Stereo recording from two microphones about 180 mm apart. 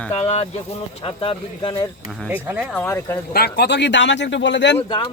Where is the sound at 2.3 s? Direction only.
10° right (ahead or behind).